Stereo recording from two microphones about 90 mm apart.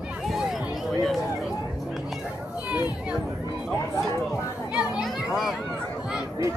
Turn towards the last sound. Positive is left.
turn(degrees=-5)  # may be behind; listen again after turning